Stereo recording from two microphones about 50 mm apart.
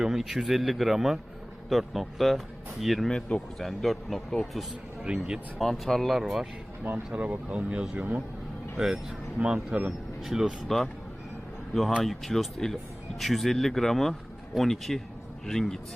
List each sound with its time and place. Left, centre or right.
0.0 s speech: centre
3.1 s speech: left
3.6 s speech: centre
5.0 s speech: centre
5.5 s speech: centre
7.1 s speech: right
7.9 s speech: right
8.8 s speech: centre
10.7 s speech: centre
12.0 s a man's voice: centre